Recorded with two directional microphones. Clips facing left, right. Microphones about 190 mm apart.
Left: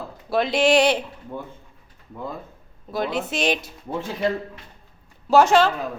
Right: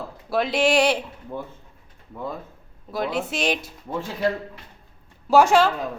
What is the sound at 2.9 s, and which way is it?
Speech, centre (ahead or behind).